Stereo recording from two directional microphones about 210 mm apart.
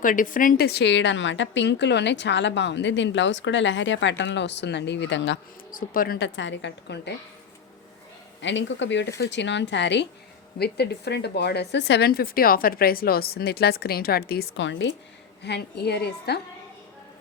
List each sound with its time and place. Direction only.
0.0 s a woman's voice: 40° left (ahead or behind); by 5.4 s 60° left (ahead or behind)
5.7 s speech: 40° left (ahead or behind)
8.4 s a woman's voice: 60° left (ahead or behind)